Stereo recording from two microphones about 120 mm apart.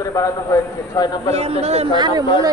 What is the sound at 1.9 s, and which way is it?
Speech, 35° right (ahead or behind).